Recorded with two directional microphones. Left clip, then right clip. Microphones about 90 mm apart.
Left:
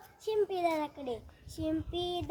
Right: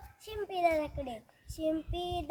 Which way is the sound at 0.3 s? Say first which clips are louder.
Even; 30° right (ahead or behind).